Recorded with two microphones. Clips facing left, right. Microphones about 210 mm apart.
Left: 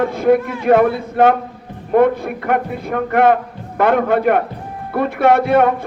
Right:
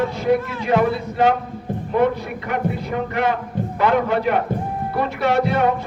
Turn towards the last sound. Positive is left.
turn(degrees=55)  # may be behind; listen again after turning